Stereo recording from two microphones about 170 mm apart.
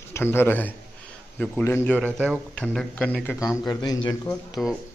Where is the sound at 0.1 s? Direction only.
15° left (ahead or behind).